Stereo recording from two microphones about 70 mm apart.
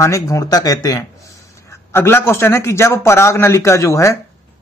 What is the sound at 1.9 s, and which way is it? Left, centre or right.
A man's voice, left.